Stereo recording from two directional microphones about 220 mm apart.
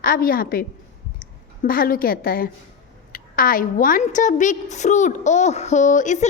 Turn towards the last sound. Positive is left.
turn(degrees=35)  # may be behind; listen again after turning